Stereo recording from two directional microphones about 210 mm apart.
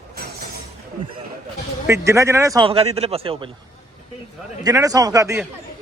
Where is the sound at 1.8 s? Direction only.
15° right (ahead or behind).